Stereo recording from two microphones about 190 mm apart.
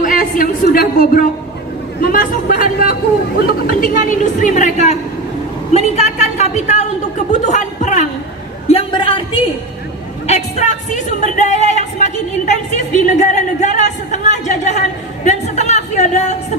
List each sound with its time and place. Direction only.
0.0 s a woman's voice: 45° left (ahead or behind)
8.6 s a woman's voice: 30° left (ahead or behind)